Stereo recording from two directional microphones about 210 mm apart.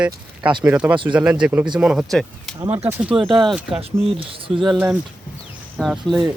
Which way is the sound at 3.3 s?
Centre (ahead or behind).